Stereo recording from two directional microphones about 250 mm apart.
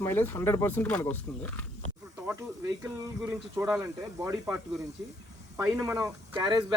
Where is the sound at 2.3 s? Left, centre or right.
Centre.